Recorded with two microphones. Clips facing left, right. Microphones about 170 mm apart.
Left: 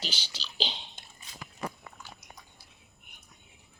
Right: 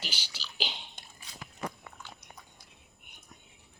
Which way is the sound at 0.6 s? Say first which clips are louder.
Left 3 dB; 20° left (ahead or behind).